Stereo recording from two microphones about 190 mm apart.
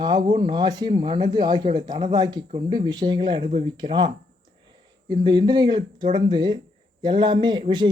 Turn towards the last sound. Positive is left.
turn(degrees=-25)  # may be behind; listen again after turning